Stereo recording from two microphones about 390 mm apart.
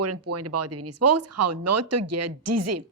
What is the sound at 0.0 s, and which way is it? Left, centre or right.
Speech, right.